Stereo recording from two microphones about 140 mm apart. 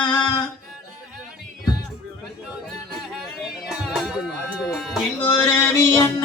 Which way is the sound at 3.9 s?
5° right (ahead or behind).